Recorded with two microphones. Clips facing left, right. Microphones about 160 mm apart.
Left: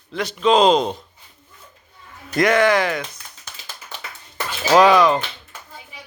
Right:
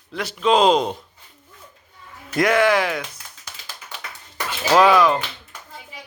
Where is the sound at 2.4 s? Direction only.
5° right (ahead or behind).